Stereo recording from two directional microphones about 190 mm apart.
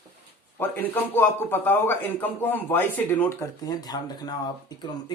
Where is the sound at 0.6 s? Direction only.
10° left (ahead or behind).